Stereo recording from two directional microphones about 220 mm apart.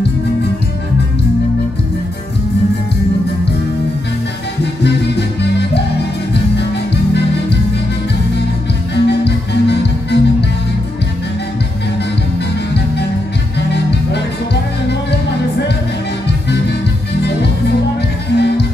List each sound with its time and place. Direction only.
4.8 s music: 50° left (ahead or behind)
8.9 s music: 50° left (ahead or behind)
13.6 s music: 50° left (ahead or behind)
18.3 s music: 50° left (ahead or behind)